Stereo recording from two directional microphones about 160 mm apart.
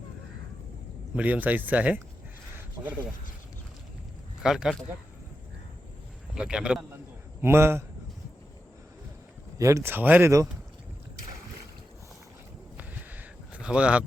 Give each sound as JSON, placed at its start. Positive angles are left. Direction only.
{"t": 1.1, "sound": "speech", "side_deg": -10}
{"t": 4.4, "sound": "a man's voice", "side_deg": -5}
{"t": 6.3, "sound": "a man's voice", "side_deg": -5}
{"t": 7.4, "sound": "speech", "side_deg": -15}
{"t": 9.6, "sound": "speech", "side_deg": -20}
{"t": 12.7, "sound": "a sound", "side_deg": -10}